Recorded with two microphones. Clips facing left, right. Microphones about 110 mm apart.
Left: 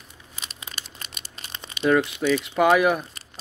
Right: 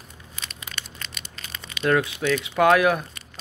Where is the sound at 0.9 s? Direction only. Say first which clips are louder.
Right 2 dB; 30° left (ahead or behind).